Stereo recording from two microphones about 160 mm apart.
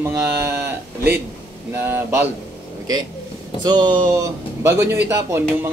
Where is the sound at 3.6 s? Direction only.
25° right (ahead or behind).